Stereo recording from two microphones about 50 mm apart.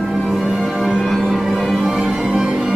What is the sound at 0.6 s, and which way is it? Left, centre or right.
Music, centre.